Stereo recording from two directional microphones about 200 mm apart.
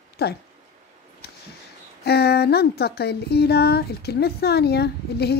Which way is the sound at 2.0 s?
55° left (ahead or behind).